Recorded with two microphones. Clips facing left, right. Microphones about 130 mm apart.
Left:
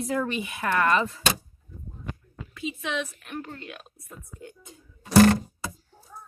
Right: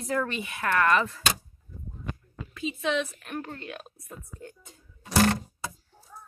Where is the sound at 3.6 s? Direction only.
45° right (ahead or behind).